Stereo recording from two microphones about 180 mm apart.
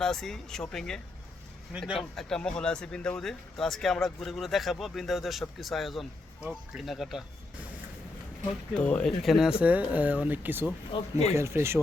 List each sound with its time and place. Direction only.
0.0 s speech: centre (ahead or behind)
8.4 s speech: 5° left (ahead or behind); by 10.7 s 10° right (ahead or behind)
10.9 s speech: 30° left (ahead or behind)
11.3 s speech: 15° right (ahead or behind)